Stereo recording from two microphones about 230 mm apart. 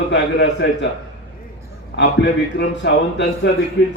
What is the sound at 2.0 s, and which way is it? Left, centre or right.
A man's voice, left.